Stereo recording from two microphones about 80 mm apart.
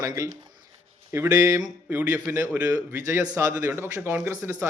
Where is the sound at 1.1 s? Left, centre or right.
Right.